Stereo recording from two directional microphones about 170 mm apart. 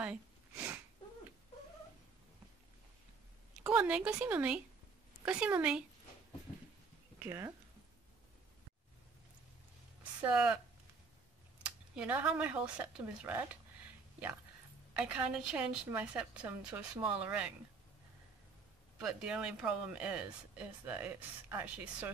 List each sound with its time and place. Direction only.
0.0 s sniff: 10° right (ahead or behind)
3.6 s a woman's voice: 10° right (ahead or behind)
7.2 s speech: 15° right (ahead or behind)
10.2 s a woman's voice: 5° right (ahead or behind)
11.6 s a woman's voice: 5° right (ahead or behind)
15.0 s a woman's voice: 5° right (ahead or behind)
18.9 s a woman's voice: 5° right (ahead or behind)